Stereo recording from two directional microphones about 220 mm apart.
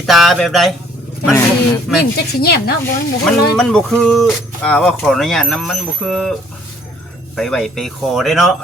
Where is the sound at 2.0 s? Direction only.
45° left (ahead or behind).